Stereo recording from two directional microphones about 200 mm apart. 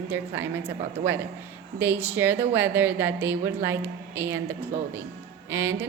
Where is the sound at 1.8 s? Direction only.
10° right (ahead or behind).